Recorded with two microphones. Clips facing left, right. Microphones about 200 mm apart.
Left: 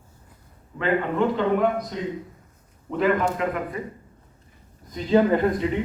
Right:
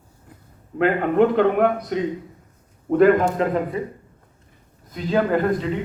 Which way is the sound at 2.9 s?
45° right (ahead or behind).